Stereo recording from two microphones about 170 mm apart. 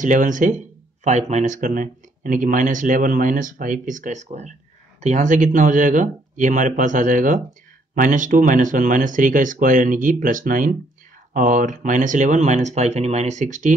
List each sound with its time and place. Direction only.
0.0 s speech: 50° right (ahead or behind)